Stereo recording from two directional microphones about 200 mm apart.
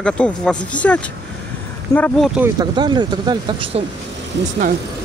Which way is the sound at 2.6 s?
20° right (ahead or behind).